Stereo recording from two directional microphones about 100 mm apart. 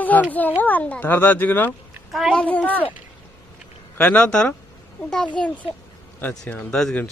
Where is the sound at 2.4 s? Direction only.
15° left (ahead or behind).